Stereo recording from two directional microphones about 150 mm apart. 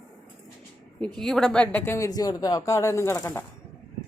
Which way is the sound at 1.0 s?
5° left (ahead or behind).